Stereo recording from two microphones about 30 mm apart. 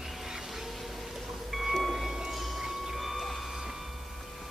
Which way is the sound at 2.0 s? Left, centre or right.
Centre.